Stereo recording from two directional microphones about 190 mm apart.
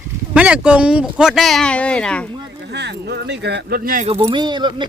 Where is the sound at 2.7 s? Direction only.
65° right (ahead or behind).